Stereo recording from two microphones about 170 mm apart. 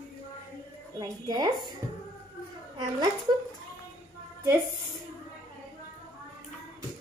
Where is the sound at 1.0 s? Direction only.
25° right (ahead or behind).